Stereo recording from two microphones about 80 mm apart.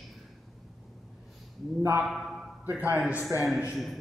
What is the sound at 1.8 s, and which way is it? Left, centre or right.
Speech, right.